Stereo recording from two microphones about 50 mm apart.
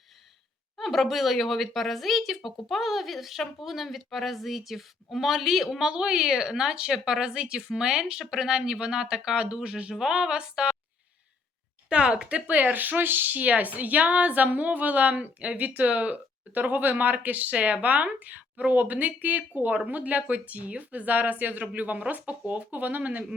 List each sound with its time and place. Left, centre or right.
0.8 s a woman's voice: centre
5.8 s speech: centre
11.9 s speech: centre